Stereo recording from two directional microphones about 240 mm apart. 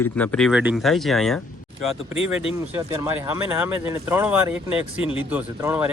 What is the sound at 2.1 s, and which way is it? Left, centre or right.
Speech, left.